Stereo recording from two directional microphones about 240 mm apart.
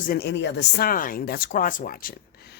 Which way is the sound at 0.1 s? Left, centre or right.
Left.